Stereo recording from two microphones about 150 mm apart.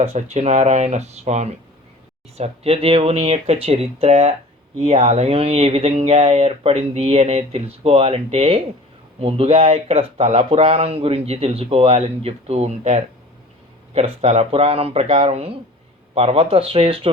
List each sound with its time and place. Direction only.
0.0 s speech: 45° right (ahead or behind)
15.0 s speech: 55° right (ahead or behind)